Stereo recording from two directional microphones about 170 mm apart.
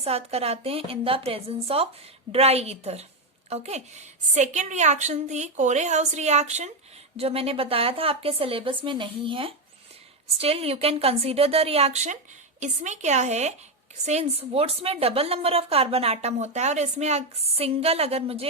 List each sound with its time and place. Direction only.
0.0 s a woman's voice: 35° right (ahead or behind)